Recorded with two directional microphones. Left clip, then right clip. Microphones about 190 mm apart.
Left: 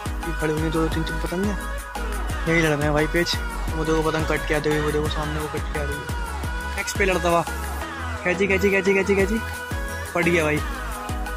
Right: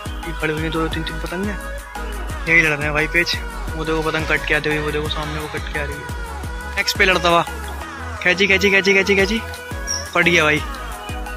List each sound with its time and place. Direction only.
0.4 s speech: 5° left (ahead or behind)
2.4 s speech: 25° left (ahead or behind)
6.8 s speech: 5° left (ahead or behind)